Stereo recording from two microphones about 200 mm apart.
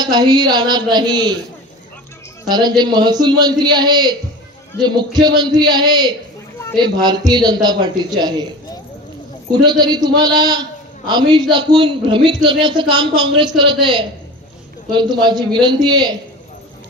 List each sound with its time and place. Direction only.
0.0 s a man's voice: 20° right (ahead or behind)
2.5 s a man's voice: 20° right (ahead or behind)
9.6 s a man's voice: 20° right (ahead or behind)